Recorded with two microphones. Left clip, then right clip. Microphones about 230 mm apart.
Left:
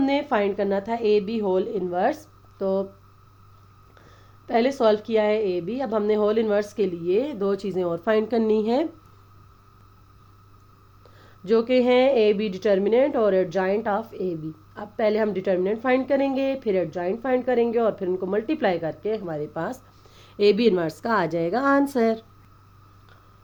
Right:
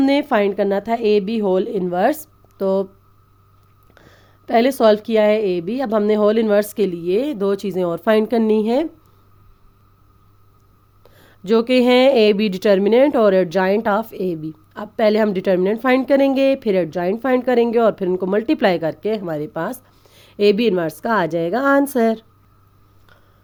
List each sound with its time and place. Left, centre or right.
0.0 s speech: right
3.9 s speech: right
11.2 s speech: right